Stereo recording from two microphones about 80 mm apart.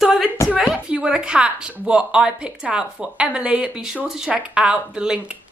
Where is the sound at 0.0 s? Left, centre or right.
Centre.